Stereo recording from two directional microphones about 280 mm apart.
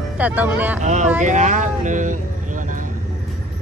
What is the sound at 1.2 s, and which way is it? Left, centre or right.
Vehicle, right.